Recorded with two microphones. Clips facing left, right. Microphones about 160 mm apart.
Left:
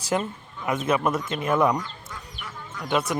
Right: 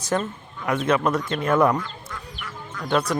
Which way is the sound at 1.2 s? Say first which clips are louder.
Right 3 dB; 20° left (ahead or behind).